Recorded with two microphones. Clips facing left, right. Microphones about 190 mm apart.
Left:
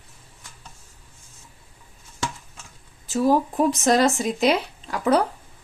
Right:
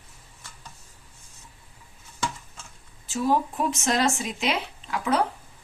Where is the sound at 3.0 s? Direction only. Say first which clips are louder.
Left 4 dB; 40° left (ahead or behind).